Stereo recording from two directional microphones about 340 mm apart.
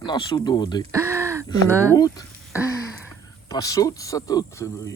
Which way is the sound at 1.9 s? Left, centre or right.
Centre.